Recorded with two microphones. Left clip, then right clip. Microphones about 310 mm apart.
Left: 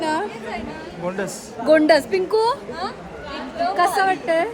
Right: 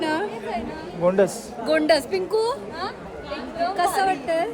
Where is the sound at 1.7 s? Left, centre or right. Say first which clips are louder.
Left 5 dB; centre.